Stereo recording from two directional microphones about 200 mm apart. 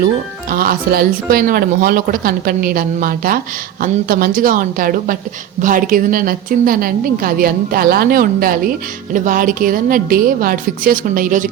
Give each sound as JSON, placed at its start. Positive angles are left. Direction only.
{"t": 0.5, "sound": "speech", "side_deg": -45}